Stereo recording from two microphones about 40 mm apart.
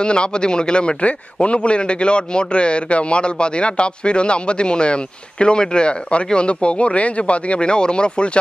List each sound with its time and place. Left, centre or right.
0.0 s a man's voice: left